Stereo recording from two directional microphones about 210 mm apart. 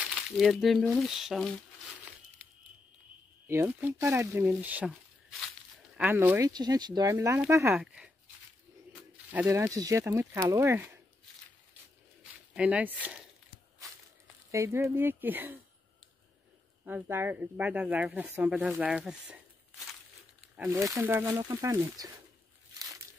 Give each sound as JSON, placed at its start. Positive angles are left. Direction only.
{"t": 0.0, "sound": "speech", "side_deg": 0}
{"t": 3.4, "sound": "speech", "side_deg": -10}
{"t": 5.9, "sound": "speech", "side_deg": -10}
{"t": 7.8, "sound": "a sound", "side_deg": -5}
{"t": 9.3, "sound": "speech", "side_deg": -10}
{"t": 12.5, "sound": "speech", "side_deg": -5}
{"t": 14.5, "sound": "speech", "side_deg": -15}
{"t": 16.8, "sound": "speech", "side_deg": -10}
{"t": 20.7, "sound": "speech", "side_deg": -15}